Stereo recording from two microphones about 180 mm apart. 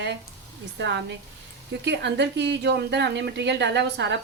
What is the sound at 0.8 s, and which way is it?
A woman's voice, 75° right (ahead or behind).